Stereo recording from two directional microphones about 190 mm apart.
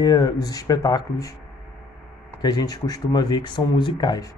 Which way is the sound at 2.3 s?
20° left (ahead or behind).